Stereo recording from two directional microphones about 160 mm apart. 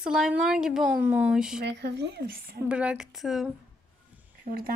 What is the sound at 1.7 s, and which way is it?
Speech, 90° right.